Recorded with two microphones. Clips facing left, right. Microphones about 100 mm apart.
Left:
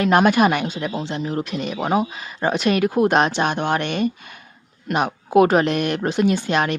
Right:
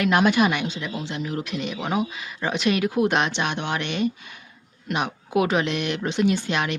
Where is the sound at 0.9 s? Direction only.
35° left (ahead or behind).